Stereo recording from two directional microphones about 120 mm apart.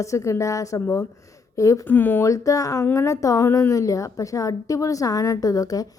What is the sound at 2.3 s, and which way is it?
A woman's voice, 25° left (ahead or behind).